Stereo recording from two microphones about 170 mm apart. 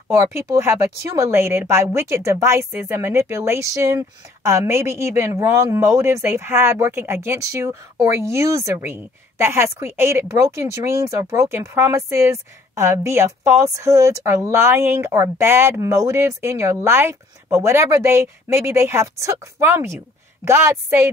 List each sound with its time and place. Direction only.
1.2 s speech: 15° right (ahead or behind)